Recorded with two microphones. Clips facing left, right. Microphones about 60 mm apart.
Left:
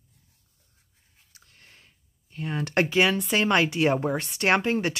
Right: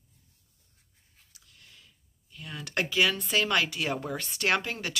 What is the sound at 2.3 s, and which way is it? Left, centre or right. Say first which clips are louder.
Speech: left 7 dB; left.